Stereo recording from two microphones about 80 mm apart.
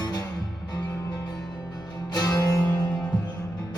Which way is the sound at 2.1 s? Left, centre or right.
Left.